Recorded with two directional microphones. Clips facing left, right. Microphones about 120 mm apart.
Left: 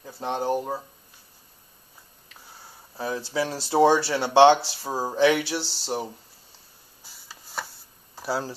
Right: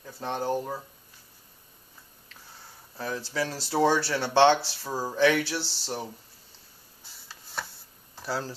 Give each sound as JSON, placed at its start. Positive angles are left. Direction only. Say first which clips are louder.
{"t": 0.0, "sound": "speech", "louder": "left 3 dB", "side_deg": 20}
{"t": 3.0, "sound": "speech", "louder": "left 3 dB", "side_deg": 15}
{"t": 7.6, "sound": "a sound", "louder": "left 2 dB", "side_deg": 5}
{"t": 8.2, "sound": "speech", "louder": "left 4 dB", "side_deg": 10}